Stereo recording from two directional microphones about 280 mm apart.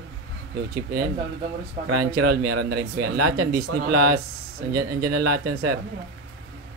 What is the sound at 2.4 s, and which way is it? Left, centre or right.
Speech, right.